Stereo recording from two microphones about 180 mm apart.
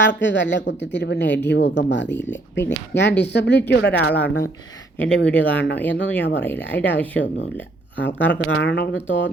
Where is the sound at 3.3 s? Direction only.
70° left (ahead or behind).